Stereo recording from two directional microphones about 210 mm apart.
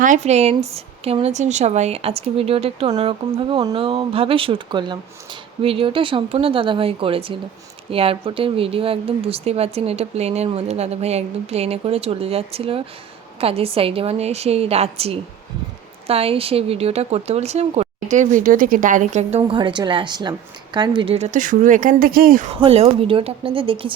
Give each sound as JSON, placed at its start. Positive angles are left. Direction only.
{"t": 0.0, "sound": "speech", "side_deg": -35}
{"t": 22.6, "sound": "speech", "side_deg": -30}